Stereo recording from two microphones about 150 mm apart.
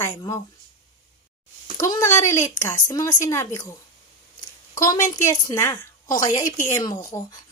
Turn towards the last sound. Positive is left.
turn(degrees=25)  # may be behind; listen again after turning